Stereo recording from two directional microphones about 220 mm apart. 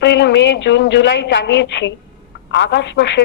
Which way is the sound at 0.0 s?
50° left (ahead or behind).